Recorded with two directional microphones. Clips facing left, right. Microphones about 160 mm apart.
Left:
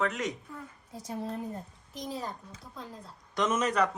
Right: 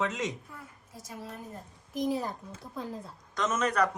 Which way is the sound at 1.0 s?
30° left (ahead or behind).